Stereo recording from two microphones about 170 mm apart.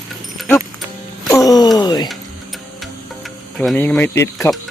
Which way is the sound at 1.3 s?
20° left (ahead or behind).